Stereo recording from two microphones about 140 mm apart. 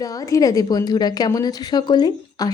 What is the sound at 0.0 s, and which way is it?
A woman's voice, 25° left (ahead or behind).